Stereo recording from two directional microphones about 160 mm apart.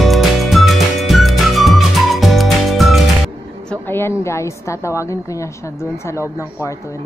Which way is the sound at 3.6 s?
15° left (ahead or behind).